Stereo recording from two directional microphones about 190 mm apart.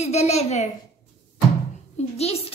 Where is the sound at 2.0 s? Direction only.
35° left (ahead or behind).